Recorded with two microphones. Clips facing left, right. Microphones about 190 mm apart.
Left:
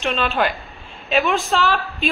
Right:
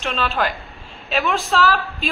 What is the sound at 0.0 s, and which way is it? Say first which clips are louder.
Speech: left 2 dB; 10° left (ahead or behind).